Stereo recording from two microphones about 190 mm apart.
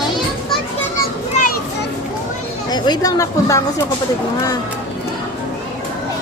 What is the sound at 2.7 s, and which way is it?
Speech, 20° left (ahead or behind).